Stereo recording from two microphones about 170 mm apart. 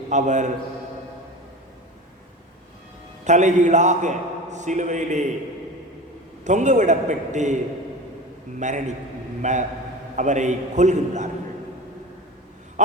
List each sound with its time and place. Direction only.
0.1 s a man's voice: 45° right (ahead or behind)
3.2 s a man's voice: 45° right (ahead or behind)
6.4 s a man's voice: 45° right (ahead or behind)